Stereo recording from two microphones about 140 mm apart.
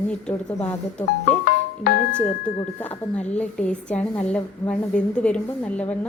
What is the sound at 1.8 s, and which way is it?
Speech, 90° left.